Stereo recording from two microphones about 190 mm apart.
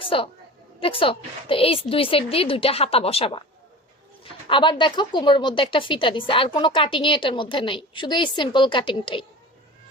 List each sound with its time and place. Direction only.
0.0 s a woman's voice: 25° left (ahead or behind)